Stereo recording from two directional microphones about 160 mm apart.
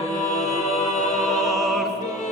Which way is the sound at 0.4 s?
Centre (ahead or behind).